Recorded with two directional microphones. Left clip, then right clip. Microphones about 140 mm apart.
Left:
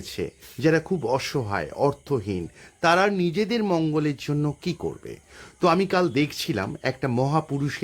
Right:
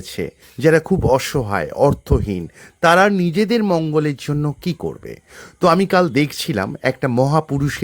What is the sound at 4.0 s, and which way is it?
Speech, 35° right (ahead or behind).